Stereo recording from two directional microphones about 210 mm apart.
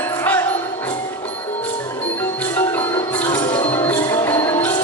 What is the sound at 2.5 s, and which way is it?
Music, 10° left (ahead or behind).